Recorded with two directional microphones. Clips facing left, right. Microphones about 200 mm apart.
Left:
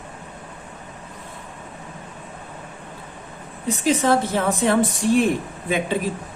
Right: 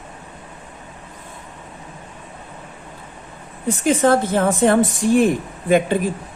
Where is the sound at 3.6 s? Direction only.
50° right (ahead or behind).